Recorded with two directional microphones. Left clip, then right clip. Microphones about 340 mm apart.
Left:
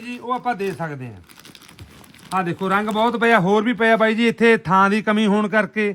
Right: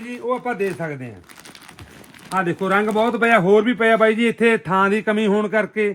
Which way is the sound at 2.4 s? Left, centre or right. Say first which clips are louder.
Right 2 dB; centre.